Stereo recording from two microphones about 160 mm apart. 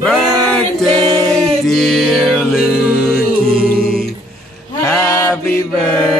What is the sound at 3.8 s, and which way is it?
Music, 65° right (ahead or behind).